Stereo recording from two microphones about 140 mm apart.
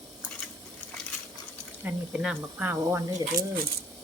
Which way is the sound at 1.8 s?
5° right (ahead or behind).